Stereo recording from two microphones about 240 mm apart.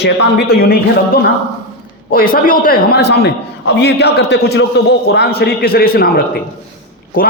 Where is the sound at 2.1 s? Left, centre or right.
Left.